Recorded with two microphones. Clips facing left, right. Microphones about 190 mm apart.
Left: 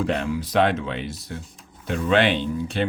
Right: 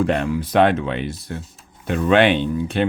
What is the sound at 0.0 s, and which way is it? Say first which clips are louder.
Speech: right 4 dB; 55° right (ahead or behind).